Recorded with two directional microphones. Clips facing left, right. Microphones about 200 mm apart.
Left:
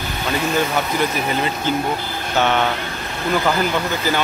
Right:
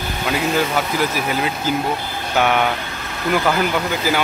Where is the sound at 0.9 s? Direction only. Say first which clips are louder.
Even; 5° right (ahead or behind).